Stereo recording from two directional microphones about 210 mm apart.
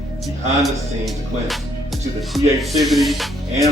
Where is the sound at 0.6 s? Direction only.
Centre (ahead or behind).